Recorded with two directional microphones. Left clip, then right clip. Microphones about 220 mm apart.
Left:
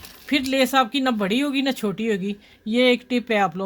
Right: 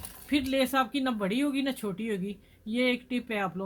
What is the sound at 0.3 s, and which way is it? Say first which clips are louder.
Speech: left 7 dB; 45° left (ahead or behind).